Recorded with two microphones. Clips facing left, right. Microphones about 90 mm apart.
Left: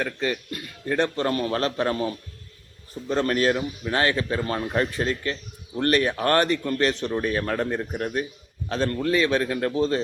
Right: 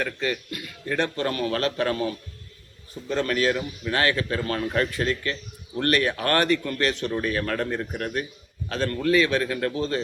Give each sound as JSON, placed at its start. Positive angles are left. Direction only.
{"t": 0.0, "sound": "speech", "side_deg": 25}